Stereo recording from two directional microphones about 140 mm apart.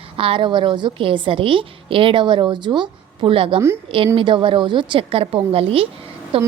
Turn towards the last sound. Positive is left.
turn(degrees=-40)  # may be behind; listen again after turning